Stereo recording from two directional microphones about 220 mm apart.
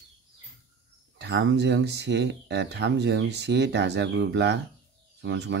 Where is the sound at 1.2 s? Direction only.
50° right (ahead or behind).